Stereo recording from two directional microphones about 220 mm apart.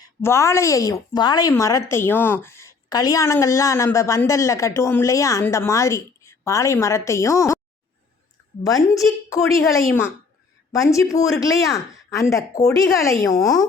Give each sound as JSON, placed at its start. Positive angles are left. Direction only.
{"t": 0.0, "sound": "a woman's voice", "side_deg": 10}
{"t": 8.6, "sound": "a woman's voice", "side_deg": 15}